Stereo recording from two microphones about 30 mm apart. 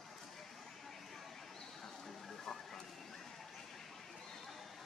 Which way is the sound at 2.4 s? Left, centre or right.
Centre.